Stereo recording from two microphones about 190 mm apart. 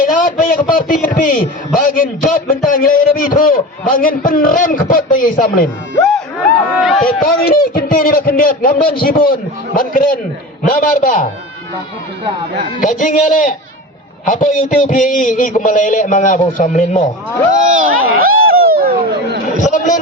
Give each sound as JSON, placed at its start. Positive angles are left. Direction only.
{"t": 0.0, "sound": "a sound", "side_deg": 45}
{"t": 1.0, "sound": "a man's voice", "side_deg": 45}
{"t": 6.7, "sound": "speech", "side_deg": 0}
{"t": 7.2, "sound": "a man's voice", "side_deg": 50}
{"t": 12.8, "sound": "a man's voice", "side_deg": 45}
{"t": 17.5, "sound": "speech", "side_deg": -40}
{"t": 19.5, "sound": "a man's voice", "side_deg": 40}